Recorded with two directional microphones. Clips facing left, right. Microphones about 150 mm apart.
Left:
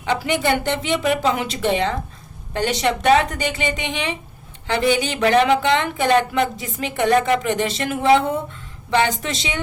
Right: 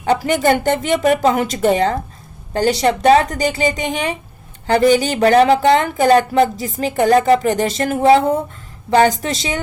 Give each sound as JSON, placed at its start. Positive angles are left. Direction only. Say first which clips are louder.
{"t": 0.0, "sound": "speech", "louder": "right 5 dB", "side_deg": -45}